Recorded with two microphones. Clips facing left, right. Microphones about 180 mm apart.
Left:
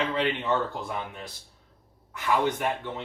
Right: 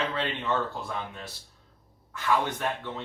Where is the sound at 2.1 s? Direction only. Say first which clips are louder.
Left 2 dB; 15° left (ahead or behind).